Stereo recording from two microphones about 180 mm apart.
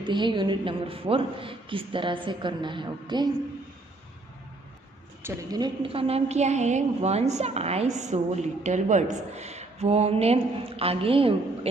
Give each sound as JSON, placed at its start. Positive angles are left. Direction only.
{"t": 0.0, "sound": "a woman's voice", "side_deg": -25}
{"t": 5.2, "sound": "a woman's voice", "side_deg": -20}